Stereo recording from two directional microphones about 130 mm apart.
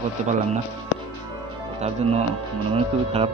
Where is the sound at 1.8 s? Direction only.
60° right (ahead or behind).